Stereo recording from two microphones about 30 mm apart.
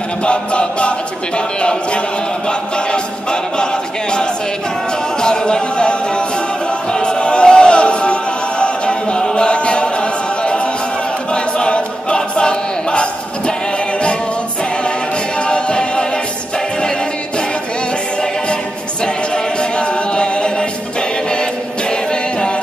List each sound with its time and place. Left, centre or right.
0.2 s choir: left
5.2 s speech: left
6.9 s music: left
11.3 s choir: left
15.3 s music: left
19.0 s a capella: left